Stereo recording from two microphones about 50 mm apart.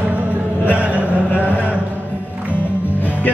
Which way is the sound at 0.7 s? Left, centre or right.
Right.